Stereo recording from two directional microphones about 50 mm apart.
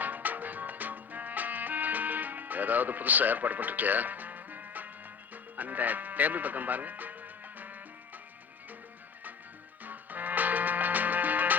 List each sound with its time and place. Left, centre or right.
0.0 s music: right
9.8 s music: right